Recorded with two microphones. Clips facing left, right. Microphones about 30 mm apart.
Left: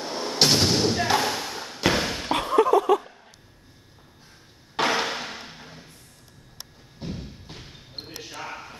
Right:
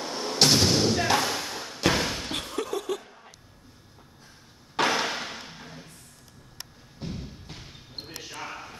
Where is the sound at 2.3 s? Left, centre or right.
Left.